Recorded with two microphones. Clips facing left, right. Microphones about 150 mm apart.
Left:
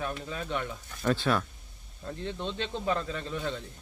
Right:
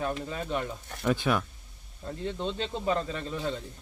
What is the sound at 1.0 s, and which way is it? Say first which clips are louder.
Speech: even; 15° right (ahead or behind).